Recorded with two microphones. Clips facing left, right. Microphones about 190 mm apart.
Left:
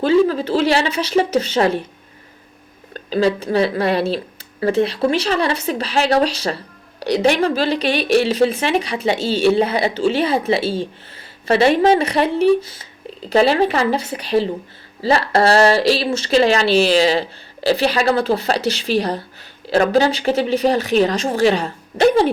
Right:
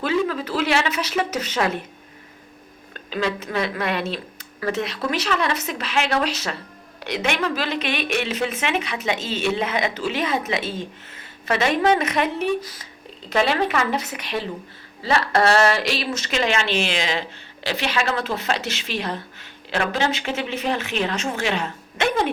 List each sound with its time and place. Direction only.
0.0 s speech: 30° left (ahead or behind)
2.9 s speech: 35° left (ahead or behind)